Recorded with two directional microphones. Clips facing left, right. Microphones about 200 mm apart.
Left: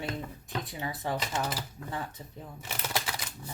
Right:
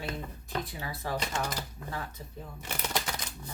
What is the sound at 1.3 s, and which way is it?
Speech, 5° left (ahead or behind).